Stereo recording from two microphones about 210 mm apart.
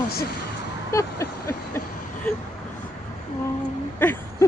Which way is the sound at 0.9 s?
15° left (ahead or behind).